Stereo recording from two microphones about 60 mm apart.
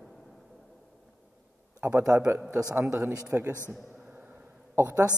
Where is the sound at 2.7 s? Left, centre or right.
Right.